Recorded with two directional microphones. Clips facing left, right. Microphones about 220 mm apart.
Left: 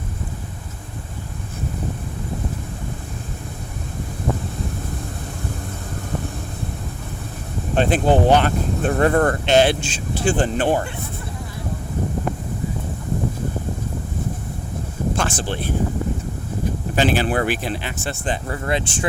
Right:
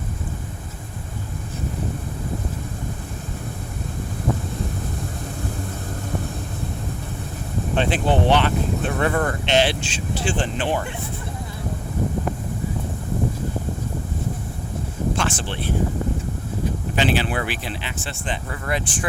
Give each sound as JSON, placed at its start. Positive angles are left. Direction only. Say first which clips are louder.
{"t": 7.8, "sound": "speech", "louder": "left 4 dB", "side_deg": 45}
{"t": 15.1, "sound": "a sound", "louder": "left 2 dB", "side_deg": 45}
{"t": 16.9, "sound": "speech", "louder": "left 3 dB", "side_deg": 45}